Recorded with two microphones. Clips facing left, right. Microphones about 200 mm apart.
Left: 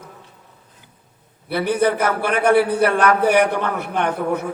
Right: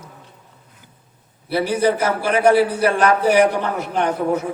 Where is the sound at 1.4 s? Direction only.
55° left (ahead or behind).